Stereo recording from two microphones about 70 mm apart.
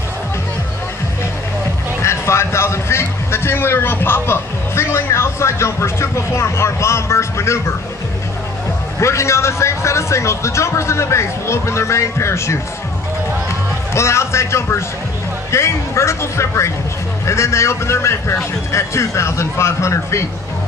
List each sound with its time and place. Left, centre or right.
2.0 s a man's voice: left
9.0 s a man's voice: left
13.9 s a man's voice: left